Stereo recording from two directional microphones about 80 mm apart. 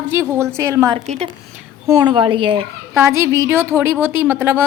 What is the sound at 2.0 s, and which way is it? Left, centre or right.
Speech, right.